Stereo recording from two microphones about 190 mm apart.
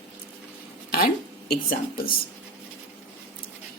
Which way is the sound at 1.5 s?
50° left (ahead or behind).